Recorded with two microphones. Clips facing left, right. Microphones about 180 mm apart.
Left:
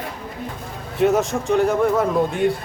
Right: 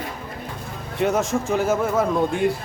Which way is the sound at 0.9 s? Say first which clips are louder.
Left 3 dB; centre (ahead or behind).